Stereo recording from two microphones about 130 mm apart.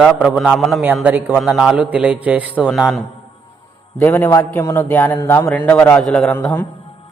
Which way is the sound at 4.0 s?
15° left (ahead or behind).